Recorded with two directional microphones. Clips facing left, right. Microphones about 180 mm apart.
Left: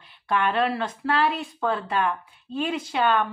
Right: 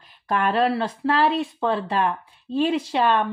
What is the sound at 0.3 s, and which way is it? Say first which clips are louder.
Speech: right 2 dB; 35° right (ahead or behind).